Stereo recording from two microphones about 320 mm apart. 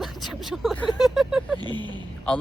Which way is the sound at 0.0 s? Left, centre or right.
Centre.